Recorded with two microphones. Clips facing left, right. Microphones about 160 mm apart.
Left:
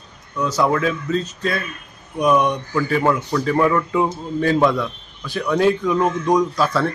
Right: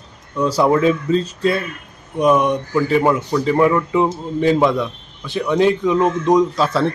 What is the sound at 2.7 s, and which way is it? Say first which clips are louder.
A man's voice: right 4 dB; 15° right (ahead or behind).